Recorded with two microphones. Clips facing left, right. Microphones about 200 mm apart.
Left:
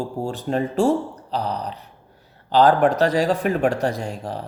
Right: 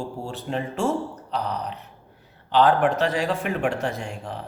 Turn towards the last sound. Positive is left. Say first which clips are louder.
# left 4 dB
turn(degrees=40)  # may be behind; listen again after turning